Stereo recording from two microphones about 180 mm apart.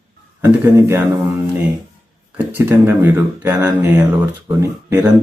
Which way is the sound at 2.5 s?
10° right (ahead or behind).